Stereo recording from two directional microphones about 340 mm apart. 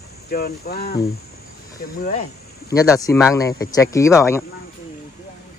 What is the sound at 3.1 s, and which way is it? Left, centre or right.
Speech, centre.